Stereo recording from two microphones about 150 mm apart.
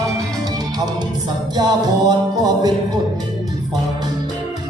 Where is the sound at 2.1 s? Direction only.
25° right (ahead or behind).